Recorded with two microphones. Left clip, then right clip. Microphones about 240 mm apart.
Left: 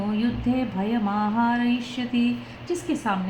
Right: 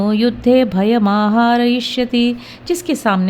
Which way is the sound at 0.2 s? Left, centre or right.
Right.